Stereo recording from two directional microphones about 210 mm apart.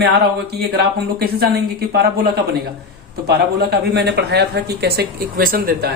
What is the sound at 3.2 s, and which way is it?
Speech, 50° right (ahead or behind).